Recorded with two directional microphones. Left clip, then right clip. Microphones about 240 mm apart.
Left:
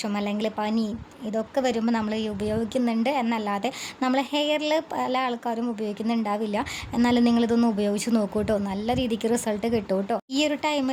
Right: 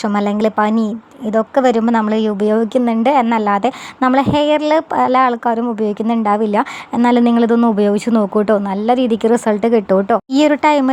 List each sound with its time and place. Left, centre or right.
0.0 s a woman's voice: right